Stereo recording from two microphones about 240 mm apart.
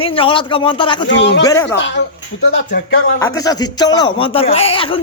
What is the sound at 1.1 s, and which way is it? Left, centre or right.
Speech, left.